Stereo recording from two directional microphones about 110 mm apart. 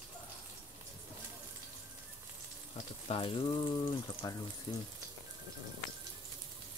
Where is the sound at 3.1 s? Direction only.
55° left (ahead or behind).